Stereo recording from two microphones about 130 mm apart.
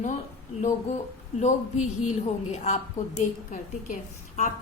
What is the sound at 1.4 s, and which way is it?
A woman's voice, 65° left (ahead or behind).